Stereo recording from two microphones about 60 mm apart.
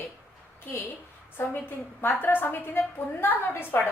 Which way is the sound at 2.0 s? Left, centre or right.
Left.